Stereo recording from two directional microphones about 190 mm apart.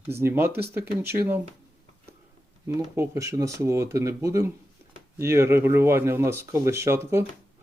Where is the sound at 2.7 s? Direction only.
15° right (ahead or behind).